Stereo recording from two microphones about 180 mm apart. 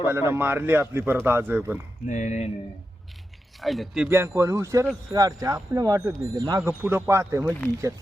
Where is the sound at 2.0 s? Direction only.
45° left (ahead or behind).